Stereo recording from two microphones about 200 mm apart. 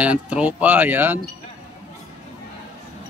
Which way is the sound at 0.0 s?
5° right (ahead or behind).